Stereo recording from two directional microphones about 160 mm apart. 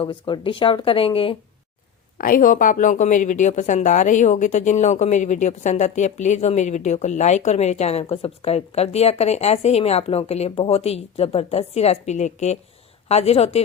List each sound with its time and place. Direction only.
0.0 s speech: 30° left (ahead or behind)
2.1 s a woman's voice: 60° left (ahead or behind); by 13.6 s 40° left (ahead or behind)